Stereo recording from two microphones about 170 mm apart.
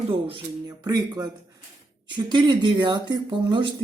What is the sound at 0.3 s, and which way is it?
A woman's voice, 25° right (ahead or behind).